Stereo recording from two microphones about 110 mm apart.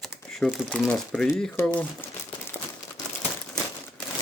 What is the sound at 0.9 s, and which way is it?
Speech, 5° left (ahead or behind).